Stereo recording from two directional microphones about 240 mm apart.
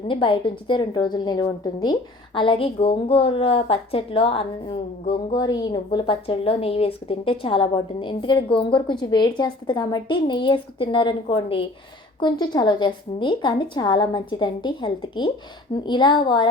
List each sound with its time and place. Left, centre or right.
0.1 s a woman's voice: left